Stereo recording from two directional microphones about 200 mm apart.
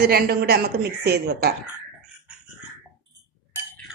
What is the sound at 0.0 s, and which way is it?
A woman's voice, 50° right (ahead or behind).